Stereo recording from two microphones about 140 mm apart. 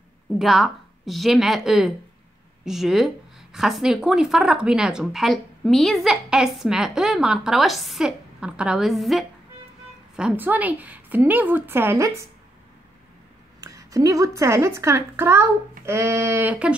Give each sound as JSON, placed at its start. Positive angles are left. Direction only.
{"t": 0.4, "sound": "a woman's voice", "side_deg": 0}
{"t": 13.6, "sound": "speech", "side_deg": -25}